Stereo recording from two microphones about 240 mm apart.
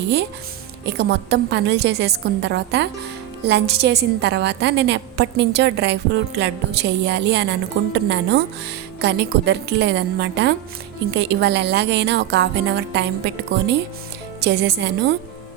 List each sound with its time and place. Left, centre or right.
0.9 s a woman's voice: right